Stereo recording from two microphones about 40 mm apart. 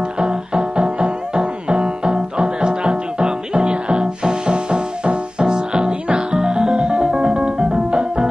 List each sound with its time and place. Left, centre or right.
0.2 s music: centre